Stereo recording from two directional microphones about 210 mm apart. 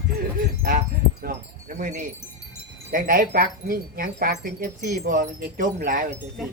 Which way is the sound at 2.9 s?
40° right (ahead or behind).